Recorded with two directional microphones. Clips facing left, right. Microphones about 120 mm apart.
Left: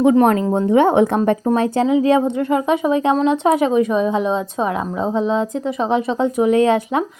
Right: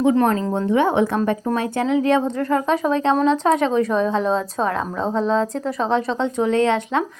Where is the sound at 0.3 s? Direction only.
20° left (ahead or behind).